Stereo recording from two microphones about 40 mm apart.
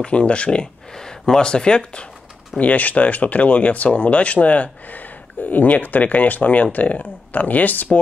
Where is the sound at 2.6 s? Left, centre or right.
Left.